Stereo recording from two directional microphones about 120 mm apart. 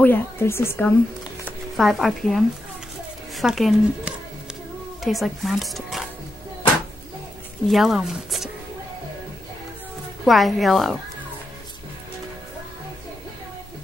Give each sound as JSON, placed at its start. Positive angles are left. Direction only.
{"t": 0.0, "sound": "speech", "side_deg": 20}
{"t": 1.8, "sound": "speech", "side_deg": 0}
{"t": 7.6, "sound": "speech", "side_deg": 0}
{"t": 10.2, "sound": "speech", "side_deg": 0}